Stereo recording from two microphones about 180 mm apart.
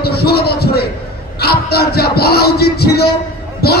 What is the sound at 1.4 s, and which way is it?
Music, 60° left (ahead or behind).